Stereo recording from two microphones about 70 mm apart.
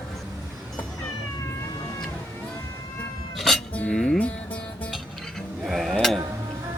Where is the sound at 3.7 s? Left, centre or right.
Centre.